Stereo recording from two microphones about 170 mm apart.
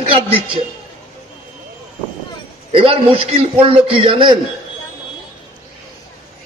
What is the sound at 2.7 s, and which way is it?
A man's voice, 35° right (ahead or behind).